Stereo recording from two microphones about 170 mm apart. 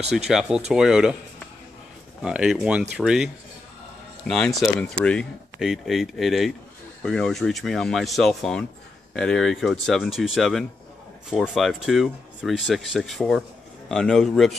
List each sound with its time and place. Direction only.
0.3 s speech: 5° right (ahead or behind)
2.2 s speech: 5° right (ahead or behind)